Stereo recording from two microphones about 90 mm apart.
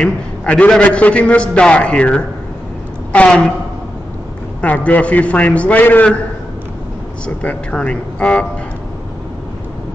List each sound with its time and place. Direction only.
0.0 s a man's voice: 15° left (ahead or behind)
4.6 s a man's voice: 15° left (ahead or behind)
7.2 s a man's voice: 15° left (ahead or behind)